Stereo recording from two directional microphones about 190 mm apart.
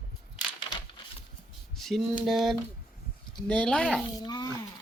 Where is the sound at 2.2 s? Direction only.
Centre (ahead or behind).